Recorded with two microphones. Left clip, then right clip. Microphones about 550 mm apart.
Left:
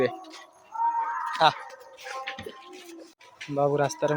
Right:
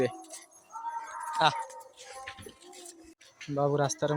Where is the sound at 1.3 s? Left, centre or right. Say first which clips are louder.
Left 4 dB; right.